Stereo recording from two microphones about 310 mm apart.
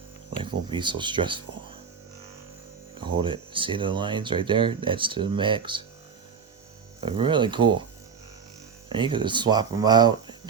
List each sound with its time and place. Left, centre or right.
0.7 s speech: centre
3.0 s speech: centre
7.0 s speech: centre
8.9 s speech: centre